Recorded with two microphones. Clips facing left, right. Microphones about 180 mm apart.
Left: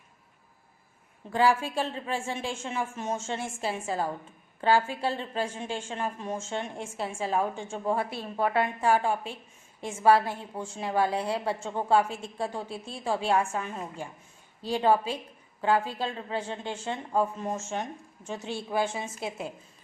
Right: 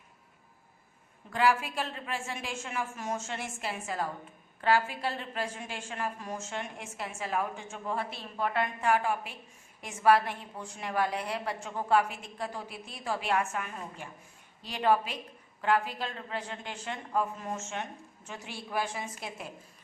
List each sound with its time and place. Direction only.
1.3 s a woman's voice: 30° left (ahead or behind)